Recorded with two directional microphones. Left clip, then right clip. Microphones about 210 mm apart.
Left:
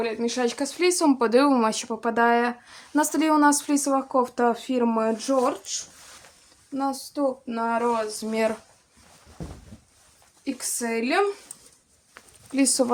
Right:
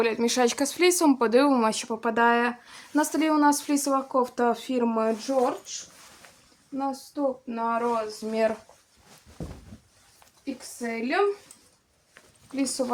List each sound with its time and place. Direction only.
0.0 s speech: 20° right (ahead or behind); by 5.3 s 15° left (ahead or behind)
6.7 s a sound: 25° left (ahead or behind)
10.8 s speech: 30° left (ahead or behind)
12.5 s speech: 40° left (ahead or behind)